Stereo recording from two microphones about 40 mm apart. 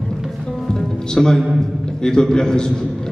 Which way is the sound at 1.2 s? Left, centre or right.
Centre.